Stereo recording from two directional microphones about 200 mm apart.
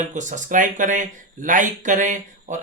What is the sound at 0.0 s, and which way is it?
Speech, 40° right (ahead or behind).